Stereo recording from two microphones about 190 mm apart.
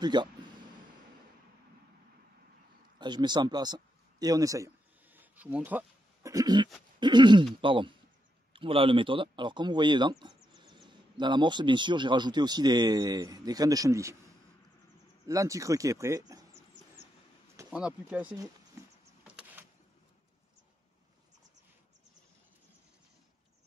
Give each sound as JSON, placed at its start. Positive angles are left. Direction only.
{"t": 0.0, "sound": "a sound", "side_deg": -25}
{"t": 3.0, "sound": "a sound", "side_deg": -25}
{"t": 7.0, "sound": "speech", "side_deg": -25}
{"t": 15.2, "sound": "speech", "side_deg": -15}
{"t": 17.6, "sound": "speech", "side_deg": -5}
{"t": 19.2, "sound": "power windows", "side_deg": -5}